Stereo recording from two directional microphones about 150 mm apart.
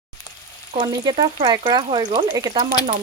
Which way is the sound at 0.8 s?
30° right (ahead or behind).